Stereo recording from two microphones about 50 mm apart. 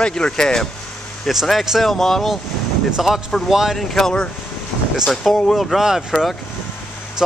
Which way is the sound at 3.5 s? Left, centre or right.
Centre.